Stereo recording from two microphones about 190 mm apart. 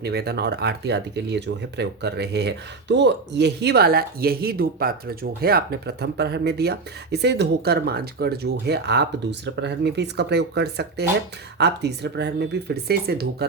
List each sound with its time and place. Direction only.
0.0 s speech: 55° right (ahead or behind)